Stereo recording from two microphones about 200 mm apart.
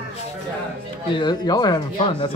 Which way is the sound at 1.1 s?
20° left (ahead or behind).